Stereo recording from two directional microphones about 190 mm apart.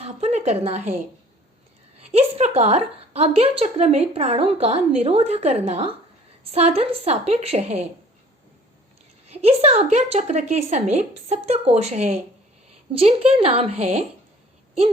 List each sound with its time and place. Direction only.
0.0 s a woman's voice: 35° right (ahead or behind)
2.0 s a woman's voice: 35° right (ahead or behind)
9.2 s a woman's voice: 30° right (ahead or behind)